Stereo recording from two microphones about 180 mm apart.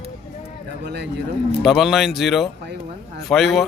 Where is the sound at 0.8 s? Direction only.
70° right (ahead or behind).